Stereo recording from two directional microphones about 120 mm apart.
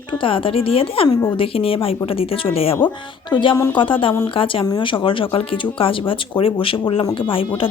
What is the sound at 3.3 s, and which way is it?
Speech, 40° left (ahead or behind).